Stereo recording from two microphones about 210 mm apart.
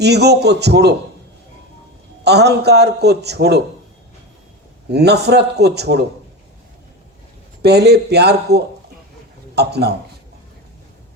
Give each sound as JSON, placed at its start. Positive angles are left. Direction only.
{"t": 0.0, "sound": "a man's voice", "side_deg": -50}
{"t": 2.2, "sound": "a man's voice", "side_deg": -50}
{"t": 4.9, "sound": "a man's voice", "side_deg": -50}
{"t": 7.6, "sound": "a man's voice", "side_deg": -50}